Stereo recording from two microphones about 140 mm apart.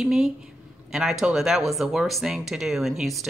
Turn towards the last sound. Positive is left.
turn(degrees=0)  # may be behind; listen again after turning